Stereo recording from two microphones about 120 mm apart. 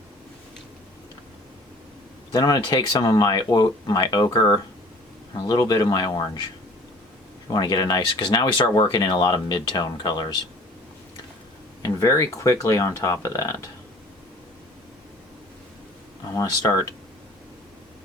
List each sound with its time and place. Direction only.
2.3 s speech: 35° left (ahead or behind)
7.5 s speech: 35° left (ahead or behind)
11.8 s speech: 25° left (ahead or behind)
16.3 s speech: 30° left (ahead or behind)